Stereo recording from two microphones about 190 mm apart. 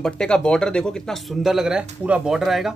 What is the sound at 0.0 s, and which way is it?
Speech, 5° left (ahead or behind).